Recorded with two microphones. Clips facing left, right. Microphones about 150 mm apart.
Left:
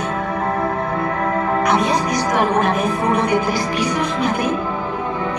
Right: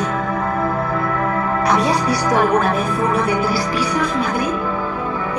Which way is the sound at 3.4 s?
30° right (ahead or behind).